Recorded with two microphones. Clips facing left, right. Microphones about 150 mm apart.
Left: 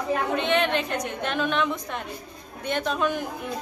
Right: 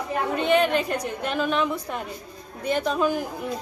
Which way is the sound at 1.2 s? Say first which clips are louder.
Right 1 dB; 5° right (ahead or behind).